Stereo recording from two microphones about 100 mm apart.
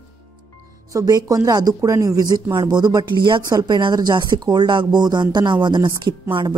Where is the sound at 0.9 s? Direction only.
35° right (ahead or behind).